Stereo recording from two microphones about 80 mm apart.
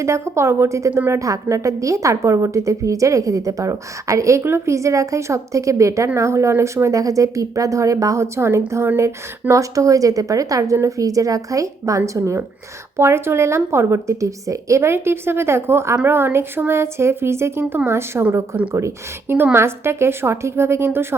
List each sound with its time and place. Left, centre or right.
0.0 s a woman's voice: right